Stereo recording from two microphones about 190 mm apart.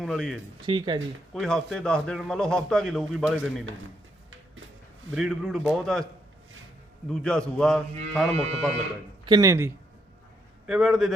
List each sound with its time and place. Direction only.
0.0 s a man's voice: centre (ahead or behind)
0.6 s speech: 25° right (ahead or behind)
1.3 s a man's voice: centre (ahead or behind)
5.1 s a man's voice: centre (ahead or behind)
7.1 s a man's voice: 5° left (ahead or behind)
9.2 s speech: 20° right (ahead or behind)
10.7 s a man's voice: 5° right (ahead or behind)